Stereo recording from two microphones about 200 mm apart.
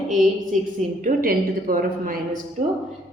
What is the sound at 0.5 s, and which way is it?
A woman's voice, 40° right (ahead or behind).